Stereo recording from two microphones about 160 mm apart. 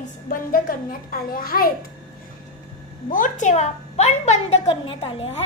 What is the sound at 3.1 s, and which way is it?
A woman's voice, 55° left (ahead or behind).